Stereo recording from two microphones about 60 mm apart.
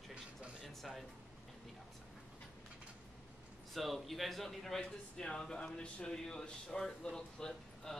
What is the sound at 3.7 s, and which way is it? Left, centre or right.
Speech, centre.